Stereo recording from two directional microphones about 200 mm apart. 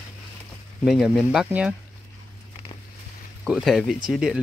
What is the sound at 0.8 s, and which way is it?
Speech, centre (ahead or behind).